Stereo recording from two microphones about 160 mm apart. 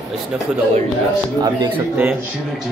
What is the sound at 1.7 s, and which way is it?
Speech, 10° right (ahead or behind).